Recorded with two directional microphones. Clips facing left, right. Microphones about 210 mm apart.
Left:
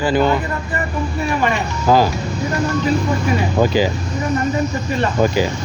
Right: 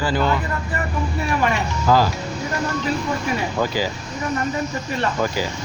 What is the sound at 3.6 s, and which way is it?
Speech, 20° left (ahead or behind).